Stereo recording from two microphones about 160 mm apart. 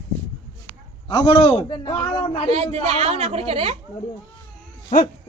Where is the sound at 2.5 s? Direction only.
40° right (ahead or behind).